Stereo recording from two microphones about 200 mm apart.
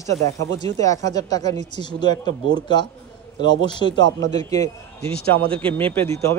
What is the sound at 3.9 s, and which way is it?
Speech, 65° right (ahead or behind).